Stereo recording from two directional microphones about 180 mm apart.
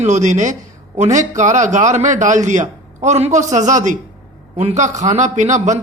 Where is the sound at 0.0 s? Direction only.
40° right (ahead or behind).